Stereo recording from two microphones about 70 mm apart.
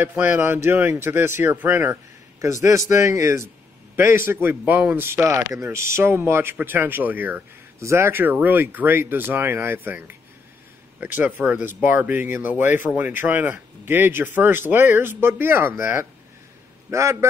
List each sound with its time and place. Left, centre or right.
0.0 s speech: right
2.4 s a man's voice: right
7.8 s a man's voice: right